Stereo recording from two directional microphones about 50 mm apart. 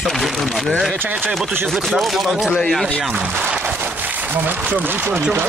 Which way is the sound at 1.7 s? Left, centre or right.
Centre.